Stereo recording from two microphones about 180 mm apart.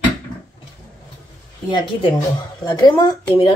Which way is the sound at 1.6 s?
25° left (ahead or behind).